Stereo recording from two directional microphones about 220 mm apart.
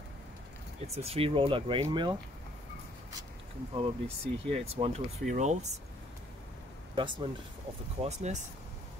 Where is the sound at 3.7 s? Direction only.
25° right (ahead or behind).